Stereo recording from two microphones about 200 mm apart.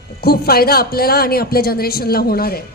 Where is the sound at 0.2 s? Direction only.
50° left (ahead or behind).